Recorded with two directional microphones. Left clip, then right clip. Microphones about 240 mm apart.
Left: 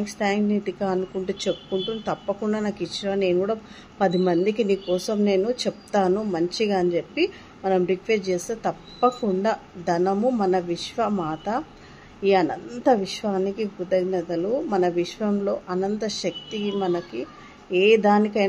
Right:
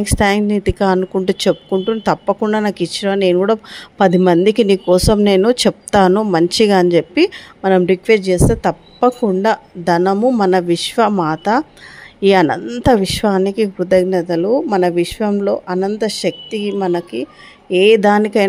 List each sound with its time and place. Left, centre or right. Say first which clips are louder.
0.0 s speech: right 10 dB; right